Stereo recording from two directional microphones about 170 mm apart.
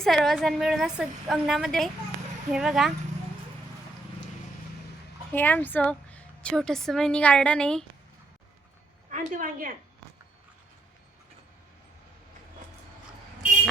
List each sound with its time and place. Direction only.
0.0 s a woman's voice: centre (ahead or behind)
5.3 s a woman's voice: 10° left (ahead or behind)
9.0 s a woman's voice: 50° right (ahead or behind)